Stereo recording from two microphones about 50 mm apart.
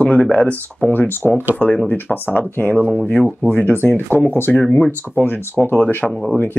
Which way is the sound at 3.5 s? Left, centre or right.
Left.